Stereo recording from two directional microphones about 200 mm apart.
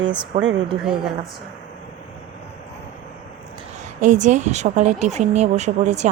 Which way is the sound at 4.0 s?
35° right (ahead or behind).